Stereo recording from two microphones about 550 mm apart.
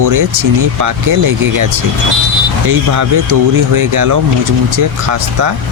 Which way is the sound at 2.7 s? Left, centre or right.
Right.